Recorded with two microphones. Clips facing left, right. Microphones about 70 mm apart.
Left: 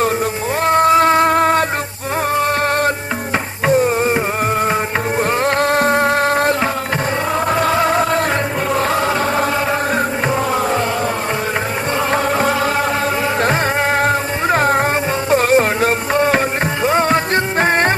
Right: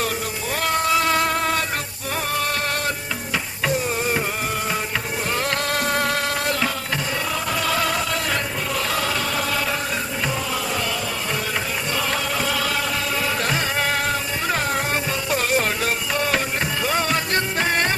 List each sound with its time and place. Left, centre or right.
0.6 s music: left
5.4 s music: left
8.7 s choir: left
12.1 s music: left